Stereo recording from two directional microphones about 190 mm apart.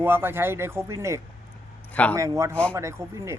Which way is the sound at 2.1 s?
15° right (ahead or behind).